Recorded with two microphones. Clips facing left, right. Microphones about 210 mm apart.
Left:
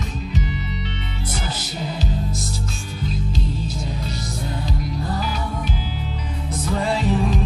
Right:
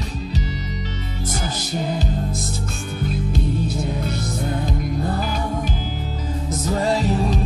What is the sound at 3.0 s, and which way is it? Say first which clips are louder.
Music: right 3 dB; 55° right (ahead or behind).